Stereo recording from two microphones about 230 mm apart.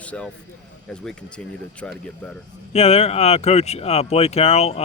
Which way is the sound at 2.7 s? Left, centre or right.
Left.